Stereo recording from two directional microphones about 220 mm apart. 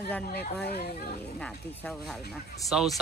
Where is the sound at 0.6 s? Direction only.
45° left (ahead or behind).